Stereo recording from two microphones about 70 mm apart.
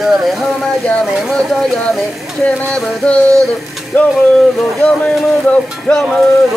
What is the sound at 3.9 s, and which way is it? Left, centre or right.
Speech, left.